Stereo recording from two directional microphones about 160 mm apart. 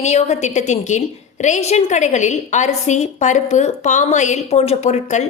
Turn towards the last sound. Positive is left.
turn(degrees=45)  # may be behind; listen again after turning